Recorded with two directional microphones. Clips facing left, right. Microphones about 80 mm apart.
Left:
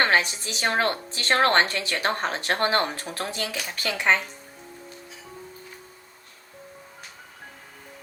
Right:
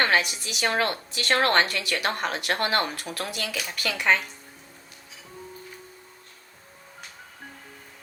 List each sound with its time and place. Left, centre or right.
0.0 s a woman's voice: left